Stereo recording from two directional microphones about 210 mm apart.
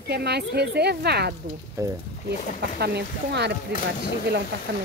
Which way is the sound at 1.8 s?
15° right (ahead or behind).